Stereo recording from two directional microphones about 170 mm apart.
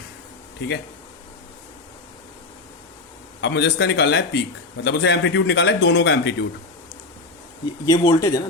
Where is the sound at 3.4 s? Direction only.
90° left.